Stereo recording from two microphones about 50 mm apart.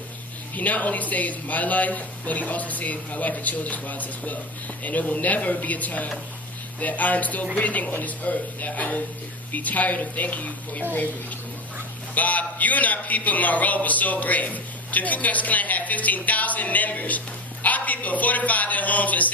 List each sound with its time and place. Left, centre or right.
0.5 s a man's voice: left
12.1 s a man's voice: left